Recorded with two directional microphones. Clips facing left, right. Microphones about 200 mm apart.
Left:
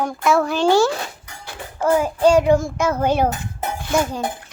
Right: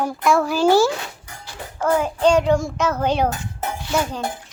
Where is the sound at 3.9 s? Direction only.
10° left (ahead or behind).